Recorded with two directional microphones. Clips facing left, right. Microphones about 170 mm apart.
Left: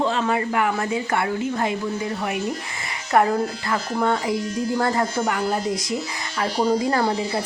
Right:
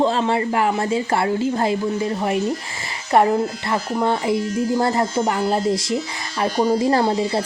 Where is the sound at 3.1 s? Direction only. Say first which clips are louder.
Right 3 dB; 25° right (ahead or behind).